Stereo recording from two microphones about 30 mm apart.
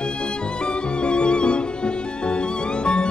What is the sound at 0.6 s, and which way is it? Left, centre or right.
Music, left.